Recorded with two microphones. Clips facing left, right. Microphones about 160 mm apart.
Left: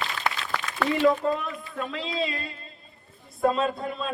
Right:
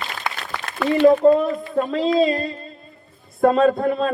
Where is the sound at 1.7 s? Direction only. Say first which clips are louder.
Right 13 dB; 40° right (ahead or behind).